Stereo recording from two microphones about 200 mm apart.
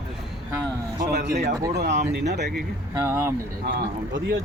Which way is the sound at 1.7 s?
60° right (ahead or behind).